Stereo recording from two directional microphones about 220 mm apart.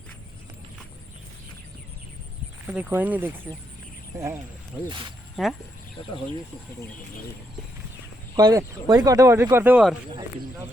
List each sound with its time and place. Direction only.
2.6 s speech: 10° right (ahead or behind)
4.9 s speech: 20° right (ahead or behind)
5.4 s speech: centre (ahead or behind)
8.4 s speech: 15° right (ahead or behind)